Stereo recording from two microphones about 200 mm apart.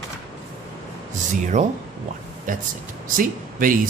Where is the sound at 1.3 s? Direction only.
40° right (ahead or behind).